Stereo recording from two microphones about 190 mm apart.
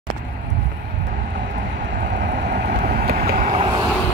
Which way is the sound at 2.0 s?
60° right (ahead or behind).